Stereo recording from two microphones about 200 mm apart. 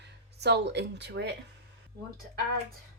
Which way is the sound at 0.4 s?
55° right (ahead or behind).